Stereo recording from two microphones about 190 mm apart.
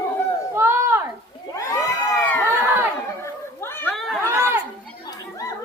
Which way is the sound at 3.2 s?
10° left (ahead or behind).